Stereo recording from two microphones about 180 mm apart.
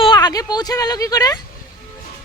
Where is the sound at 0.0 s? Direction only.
25° left (ahead or behind).